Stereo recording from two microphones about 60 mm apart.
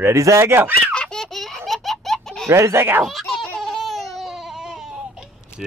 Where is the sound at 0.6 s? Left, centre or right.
Right.